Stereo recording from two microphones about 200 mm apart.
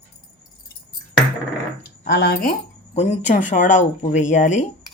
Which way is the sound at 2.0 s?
50° left (ahead or behind).